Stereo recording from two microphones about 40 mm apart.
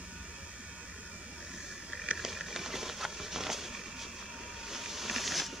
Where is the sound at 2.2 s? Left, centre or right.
Centre.